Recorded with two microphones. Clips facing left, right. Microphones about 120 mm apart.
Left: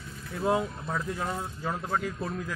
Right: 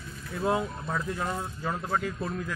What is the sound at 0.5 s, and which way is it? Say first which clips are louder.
Speech: even; 10° left (ahead or behind).